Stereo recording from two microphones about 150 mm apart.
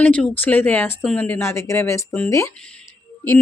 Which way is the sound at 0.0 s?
10° left (ahead or behind).